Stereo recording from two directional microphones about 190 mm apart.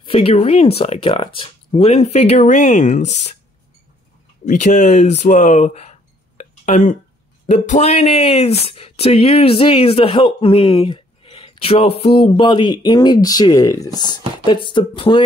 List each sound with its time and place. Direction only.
0.0 s speech: 30° left (ahead or behind)
4.5 s speech: 40° left (ahead or behind)